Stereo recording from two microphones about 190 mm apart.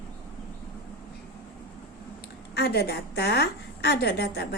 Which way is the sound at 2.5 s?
55° left (ahead or behind).